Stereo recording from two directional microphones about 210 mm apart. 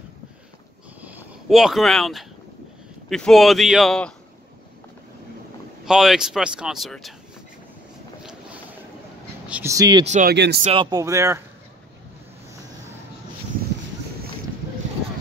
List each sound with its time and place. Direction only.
1.0 s a sound: 5° right (ahead or behind)
3.1 s speech: centre (ahead or behind)
5.9 s speech: centre (ahead or behind)
9.5 s speech: 10° right (ahead or behind)
10.0 s speech: 35° right (ahead or behind)
10.3 s speech: 55° right (ahead or behind)
10.6 s speech: 25° right (ahead or behind)